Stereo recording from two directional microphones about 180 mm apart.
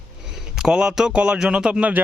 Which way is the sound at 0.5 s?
5° right (ahead or behind).